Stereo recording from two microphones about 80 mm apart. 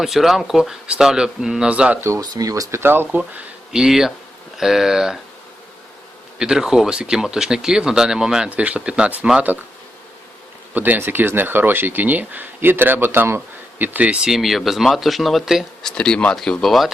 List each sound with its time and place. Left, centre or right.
0.0 s speech: centre
2.0 s speech: right
2.3 s speech: right
2.7 s speech: right
3.7 s speech: centre
6.4 s speech: centre
10.8 s speech: right; by 15.6 s centre
15.8 s speech: centre